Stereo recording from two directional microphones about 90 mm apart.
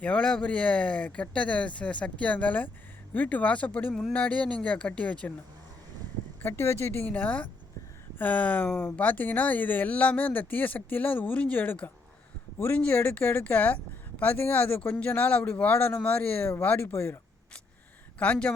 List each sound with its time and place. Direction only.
0.0 s speech: 10° left (ahead or behind)
6.4 s speech: 25° left (ahead or behind)
18.2 s speech: 15° left (ahead or behind)